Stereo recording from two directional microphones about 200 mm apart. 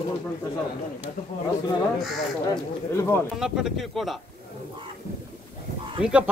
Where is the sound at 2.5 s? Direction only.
15° left (ahead or behind).